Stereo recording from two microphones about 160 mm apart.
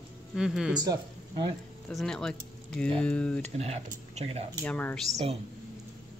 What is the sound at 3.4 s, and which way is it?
Speech, 40° right (ahead or behind).